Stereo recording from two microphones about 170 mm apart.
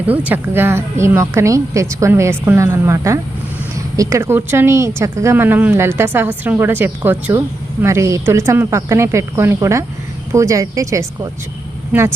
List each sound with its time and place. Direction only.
0.3 s a woman's voice: 10° right (ahead or behind)